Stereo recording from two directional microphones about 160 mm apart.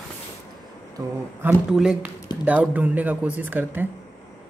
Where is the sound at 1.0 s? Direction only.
20° right (ahead or behind).